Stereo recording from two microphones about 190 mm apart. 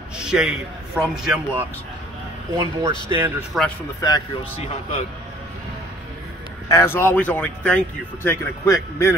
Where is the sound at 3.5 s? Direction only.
Centre (ahead or behind).